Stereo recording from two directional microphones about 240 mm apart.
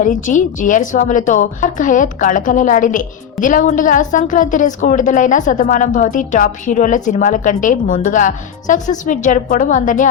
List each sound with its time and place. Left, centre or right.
0.0 s a woman's voice: left